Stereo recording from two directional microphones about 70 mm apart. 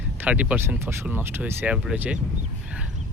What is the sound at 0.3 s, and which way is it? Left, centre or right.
Speech, right.